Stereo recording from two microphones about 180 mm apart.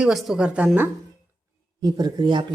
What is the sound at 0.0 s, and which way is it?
Speech, centre (ahead or behind).